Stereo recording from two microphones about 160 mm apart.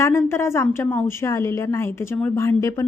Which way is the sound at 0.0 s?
15° left (ahead or behind).